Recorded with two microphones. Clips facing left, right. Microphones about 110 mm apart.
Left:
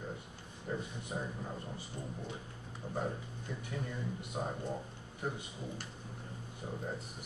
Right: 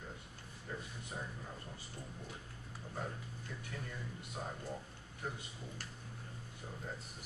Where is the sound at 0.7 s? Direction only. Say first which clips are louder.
Left 7 dB; 20° left (ahead or behind).